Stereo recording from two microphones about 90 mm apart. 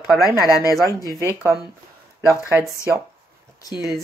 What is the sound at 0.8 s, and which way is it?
Speech, 40° right (ahead or behind).